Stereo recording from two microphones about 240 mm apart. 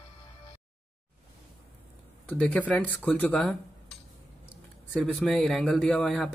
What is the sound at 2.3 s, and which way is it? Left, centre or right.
Speech, centre.